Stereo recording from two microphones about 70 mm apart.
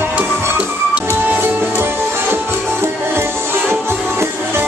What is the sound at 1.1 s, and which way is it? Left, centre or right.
Music, right.